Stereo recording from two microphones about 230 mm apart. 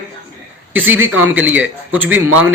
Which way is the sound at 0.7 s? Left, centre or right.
Centre.